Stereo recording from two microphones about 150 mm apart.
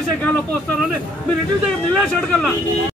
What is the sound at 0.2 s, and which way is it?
A man's voice, 10° left (ahead or behind).